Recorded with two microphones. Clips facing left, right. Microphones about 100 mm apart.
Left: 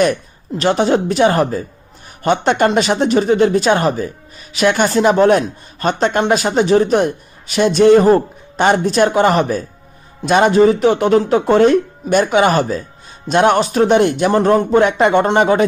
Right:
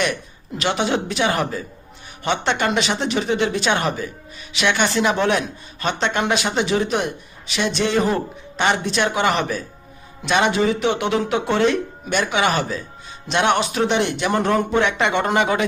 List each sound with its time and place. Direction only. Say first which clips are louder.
0.0 s speech: left 8 dB; 40° left (ahead or behind)